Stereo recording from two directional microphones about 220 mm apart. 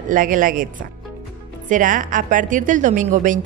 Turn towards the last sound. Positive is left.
turn(degrees=-35)  # may be behind; listen again after turning